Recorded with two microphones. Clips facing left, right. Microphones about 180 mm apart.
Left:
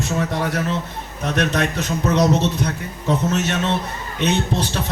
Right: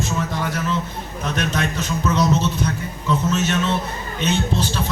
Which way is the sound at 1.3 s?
65° left (ahead or behind).